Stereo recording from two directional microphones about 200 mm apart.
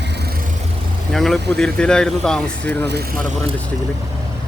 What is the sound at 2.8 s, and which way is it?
Speech, 55° right (ahead or behind).